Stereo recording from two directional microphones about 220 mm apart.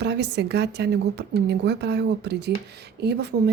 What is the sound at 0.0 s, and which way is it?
Speech, 50° right (ahead or behind).